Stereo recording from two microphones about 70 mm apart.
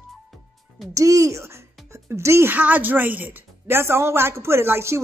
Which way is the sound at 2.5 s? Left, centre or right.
Right.